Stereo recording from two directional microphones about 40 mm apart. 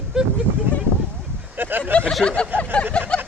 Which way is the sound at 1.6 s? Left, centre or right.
Right.